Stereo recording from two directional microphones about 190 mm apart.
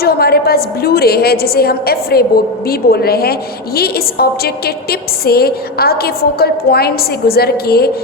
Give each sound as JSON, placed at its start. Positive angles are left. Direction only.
{"t": 0.0, "sound": "a woman's voice", "side_deg": 55}